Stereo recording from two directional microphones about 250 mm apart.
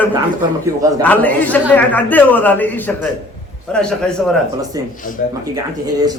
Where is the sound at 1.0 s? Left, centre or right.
Centre.